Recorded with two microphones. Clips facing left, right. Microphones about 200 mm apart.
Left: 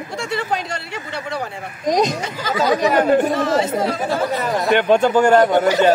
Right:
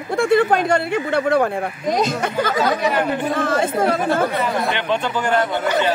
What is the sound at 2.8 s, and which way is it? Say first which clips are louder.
Speech: left 5 dB; 40° left (ahead or behind).